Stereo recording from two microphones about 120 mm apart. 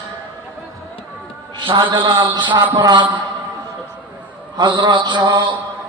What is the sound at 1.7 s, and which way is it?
A man's voice, 45° right (ahead or behind).